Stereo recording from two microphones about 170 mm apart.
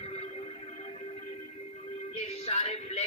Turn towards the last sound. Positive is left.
turn(degrees=40)  # may be behind; listen again after turning